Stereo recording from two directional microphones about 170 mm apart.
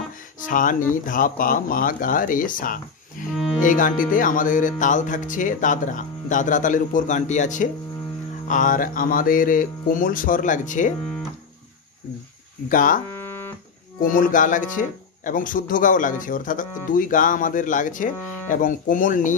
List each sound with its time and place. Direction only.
0.5 s speech: 50° left (ahead or behind)
12.6 s speech: 50° left (ahead or behind)
14.0 s speech: 50° left (ahead or behind)